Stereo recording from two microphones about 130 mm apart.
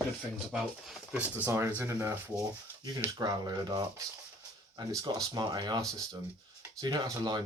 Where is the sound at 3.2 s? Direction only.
30° right (ahead or behind).